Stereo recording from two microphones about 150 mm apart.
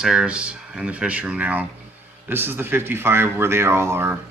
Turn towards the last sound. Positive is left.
turn(degrees=-15)  # may be behind; listen again after turning